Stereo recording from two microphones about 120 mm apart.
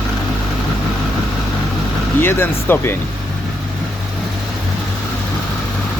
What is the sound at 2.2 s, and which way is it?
Speech, 20° left (ahead or behind).